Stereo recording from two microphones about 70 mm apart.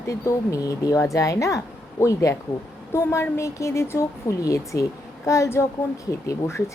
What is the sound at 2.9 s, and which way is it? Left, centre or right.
A woman's voice, left.